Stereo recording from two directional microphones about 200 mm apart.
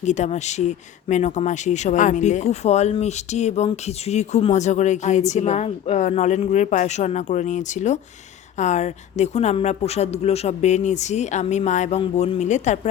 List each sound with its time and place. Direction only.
0.0 s speech: 35° left (ahead or behind)